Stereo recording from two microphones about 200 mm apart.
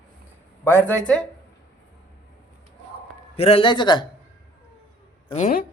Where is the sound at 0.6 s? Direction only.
10° left (ahead or behind).